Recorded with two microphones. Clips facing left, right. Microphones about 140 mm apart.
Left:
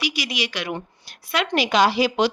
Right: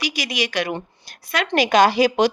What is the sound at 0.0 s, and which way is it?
A woman's voice, 45° right (ahead or behind).